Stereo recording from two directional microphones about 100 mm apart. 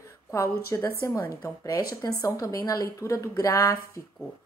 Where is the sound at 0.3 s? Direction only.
30° left (ahead or behind).